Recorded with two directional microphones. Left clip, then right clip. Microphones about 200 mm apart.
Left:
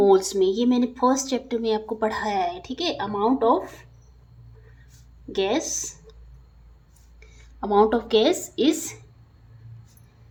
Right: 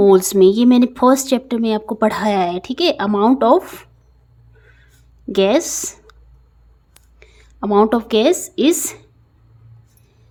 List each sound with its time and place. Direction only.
0.0 s speech: 40° right (ahead or behind)
5.3 s speech: 50° right (ahead or behind)
7.2 s speech: 40° right (ahead or behind)